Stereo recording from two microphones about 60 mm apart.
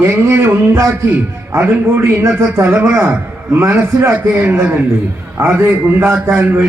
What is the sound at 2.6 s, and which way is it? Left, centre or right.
A man's voice, right.